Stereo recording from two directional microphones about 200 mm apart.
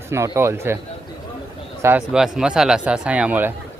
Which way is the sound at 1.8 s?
5° right (ahead or behind).